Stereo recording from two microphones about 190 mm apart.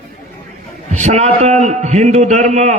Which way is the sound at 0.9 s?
35° right (ahead or behind).